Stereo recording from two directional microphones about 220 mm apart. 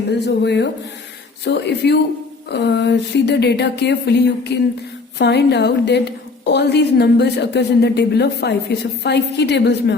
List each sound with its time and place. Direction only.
0.1 s a woman's voice: 50° left (ahead or behind)